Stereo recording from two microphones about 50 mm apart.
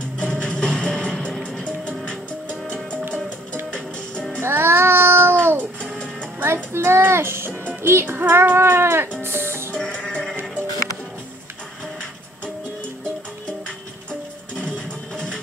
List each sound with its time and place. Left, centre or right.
0.3 s music: centre
4.4 s music: right
7.6 s speech: right
9.2 s music: right
9.8 s sheep: centre